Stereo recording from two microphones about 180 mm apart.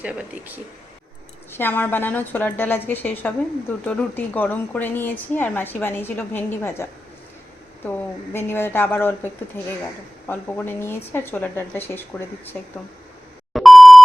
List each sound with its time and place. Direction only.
0.0 s speech: 10° right (ahead or behind)
1.5 s a woman's voice: 10° left (ahead or behind)
7.9 s a woman's voice: 10° left (ahead or behind)
13.5 s beep: centre (ahead or behind)